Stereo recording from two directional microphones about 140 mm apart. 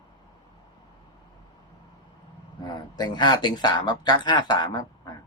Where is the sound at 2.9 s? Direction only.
30° left (ahead or behind).